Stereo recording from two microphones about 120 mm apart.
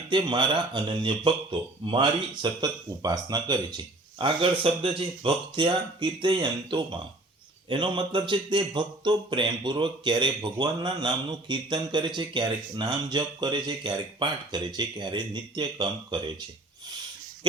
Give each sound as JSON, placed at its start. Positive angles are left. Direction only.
{"t": 0.1, "sound": "speech", "side_deg": -40}
{"t": 17.5, "sound": "dog", "side_deg": -45}